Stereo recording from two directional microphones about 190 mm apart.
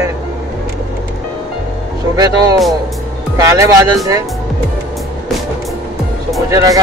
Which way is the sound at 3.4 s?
15° right (ahead or behind).